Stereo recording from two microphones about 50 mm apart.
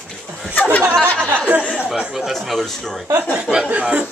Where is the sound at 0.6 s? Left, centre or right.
Left.